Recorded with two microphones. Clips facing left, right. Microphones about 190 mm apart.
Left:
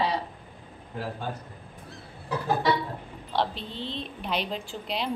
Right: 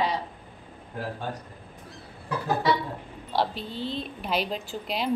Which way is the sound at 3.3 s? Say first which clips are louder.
Right 1 dB; 5° right (ahead or behind).